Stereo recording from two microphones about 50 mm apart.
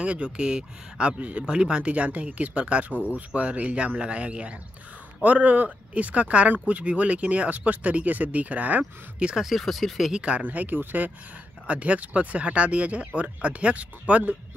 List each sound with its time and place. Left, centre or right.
0.0 s speech: right
9.2 s speech: centre
10.1 s speech: right
10.4 s speech: right
11.6 s speech: right